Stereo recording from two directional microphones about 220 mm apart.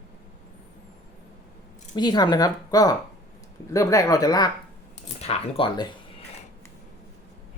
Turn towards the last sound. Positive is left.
turn(degrees=20)  # may be behind; listen again after turning